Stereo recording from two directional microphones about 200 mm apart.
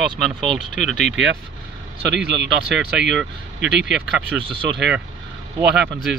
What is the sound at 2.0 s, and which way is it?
Speech, 60° right (ahead or behind).